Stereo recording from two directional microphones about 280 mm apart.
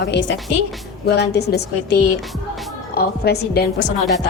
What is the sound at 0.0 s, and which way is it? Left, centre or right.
A woman's voice, left.